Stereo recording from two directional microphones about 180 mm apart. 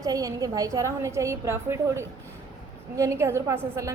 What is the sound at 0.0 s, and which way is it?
A woman's voice, 20° right (ahead or behind).